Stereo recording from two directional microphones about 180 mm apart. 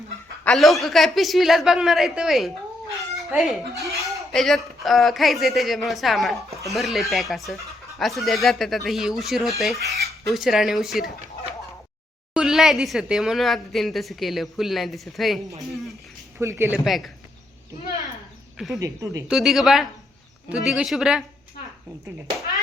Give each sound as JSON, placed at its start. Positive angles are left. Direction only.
{"t": 0.4, "sound": "a woman's voice", "side_deg": 0}
{"t": 3.0, "sound": "chicken", "side_deg": 0}
{"t": 4.0, "sound": "a woman's voice", "side_deg": 0}
{"t": 12.3, "sound": "a woman's voice", "side_deg": -5}
{"t": 16.4, "sound": "speech", "side_deg": -15}
{"t": 18.5, "sound": "speech", "side_deg": 0}
{"t": 18.8, "sound": "speech", "side_deg": -20}
{"t": 19.3, "sound": "a woman's voice", "side_deg": 0}